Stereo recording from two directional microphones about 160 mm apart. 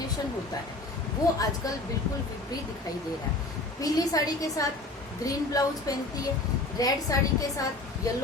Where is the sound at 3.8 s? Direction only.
20° left (ahead or behind).